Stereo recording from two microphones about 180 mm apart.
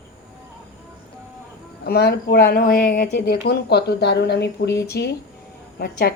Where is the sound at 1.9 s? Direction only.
60° left (ahead or behind).